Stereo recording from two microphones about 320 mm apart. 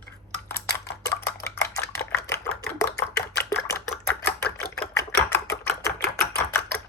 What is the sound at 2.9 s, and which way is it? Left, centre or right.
Chopping, left.